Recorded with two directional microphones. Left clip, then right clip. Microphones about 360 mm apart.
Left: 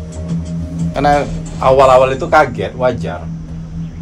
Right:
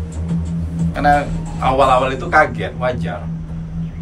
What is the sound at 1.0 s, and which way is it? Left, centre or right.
A man's voice, centre.